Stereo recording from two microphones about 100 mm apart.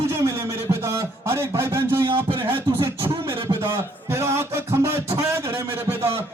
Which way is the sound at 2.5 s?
25° right (ahead or behind).